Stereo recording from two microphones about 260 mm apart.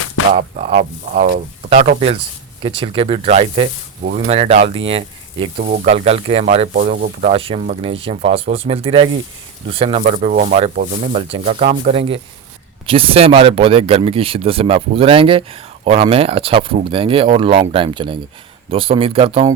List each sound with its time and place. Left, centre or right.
0.3 s speech: right